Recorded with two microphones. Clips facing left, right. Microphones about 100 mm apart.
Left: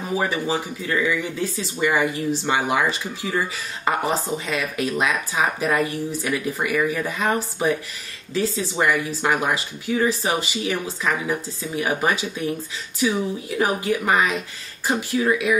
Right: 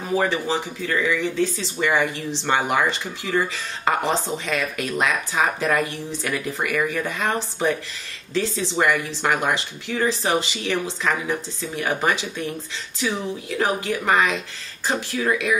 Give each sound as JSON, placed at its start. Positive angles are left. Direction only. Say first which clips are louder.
{"t": 0.2, "sound": "speech", "louder": "right 1 dB", "side_deg": 10}